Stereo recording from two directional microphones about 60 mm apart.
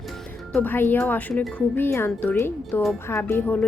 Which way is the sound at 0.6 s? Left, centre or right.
Left.